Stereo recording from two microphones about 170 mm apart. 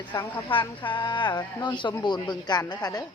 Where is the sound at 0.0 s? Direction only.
25° left (ahead or behind).